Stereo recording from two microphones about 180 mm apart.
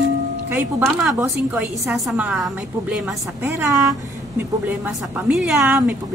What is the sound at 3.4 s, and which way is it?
A woman's voice, 15° right (ahead or behind).